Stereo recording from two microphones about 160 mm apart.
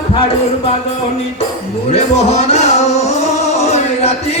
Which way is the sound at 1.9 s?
40° left (ahead or behind).